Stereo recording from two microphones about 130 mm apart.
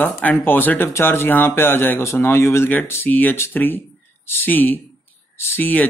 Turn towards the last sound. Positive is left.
turn(degrees=15)  # may be behind; listen again after turning